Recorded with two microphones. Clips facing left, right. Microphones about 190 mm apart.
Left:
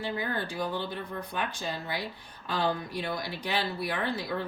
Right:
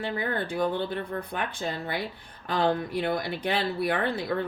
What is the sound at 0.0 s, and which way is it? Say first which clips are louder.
Speech: right 3 dB; 55° right (ahead or behind).